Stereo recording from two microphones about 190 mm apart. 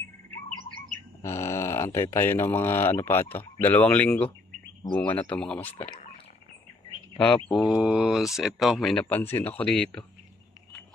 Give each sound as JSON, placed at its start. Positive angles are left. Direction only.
{"t": 1.2, "sound": "speech", "side_deg": 15}
{"t": 7.2, "sound": "speech", "side_deg": 5}